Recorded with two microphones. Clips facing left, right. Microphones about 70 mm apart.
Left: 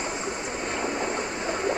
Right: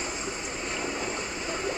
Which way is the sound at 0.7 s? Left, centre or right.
Left.